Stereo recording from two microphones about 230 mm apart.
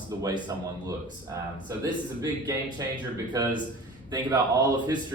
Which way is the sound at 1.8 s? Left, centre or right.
Centre.